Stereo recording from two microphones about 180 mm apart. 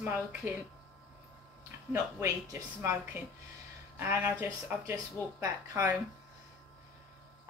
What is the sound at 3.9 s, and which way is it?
A woman's voice, 10° right (ahead or behind).